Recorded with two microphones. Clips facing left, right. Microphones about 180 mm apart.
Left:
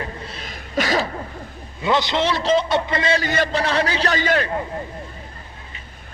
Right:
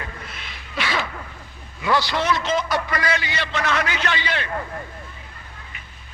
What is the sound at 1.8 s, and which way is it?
Speech, 20° left (ahead or behind).